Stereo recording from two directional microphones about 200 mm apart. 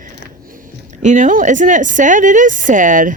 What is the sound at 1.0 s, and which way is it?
Speech, 40° right (ahead or behind).